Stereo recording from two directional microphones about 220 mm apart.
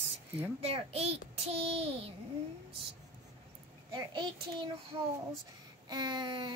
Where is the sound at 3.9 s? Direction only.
20° right (ahead or behind).